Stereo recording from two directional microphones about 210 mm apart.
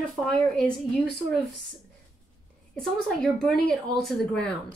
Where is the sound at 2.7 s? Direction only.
Centre (ahead or behind).